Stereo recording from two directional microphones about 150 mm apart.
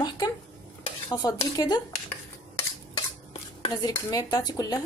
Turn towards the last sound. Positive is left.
turn(degrees=25)  # may be behind; listen again after turning